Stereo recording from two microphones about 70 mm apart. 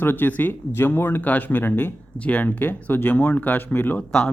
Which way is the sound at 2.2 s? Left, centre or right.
Centre.